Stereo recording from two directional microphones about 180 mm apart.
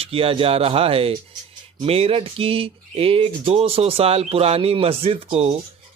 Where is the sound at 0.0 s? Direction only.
30° right (ahead or behind).